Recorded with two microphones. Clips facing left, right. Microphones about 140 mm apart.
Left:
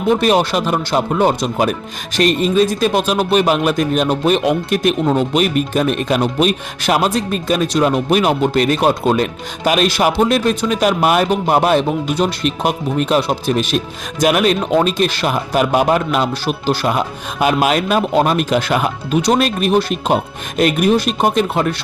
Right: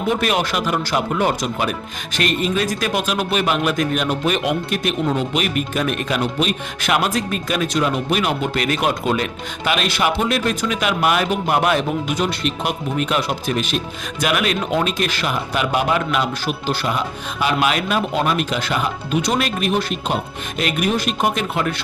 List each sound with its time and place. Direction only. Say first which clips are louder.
0.1 s speech: left 7 dB; 30° left (ahead or behind)